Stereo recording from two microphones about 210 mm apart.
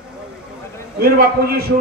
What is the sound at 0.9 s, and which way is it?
Speech, 45° right (ahead or behind).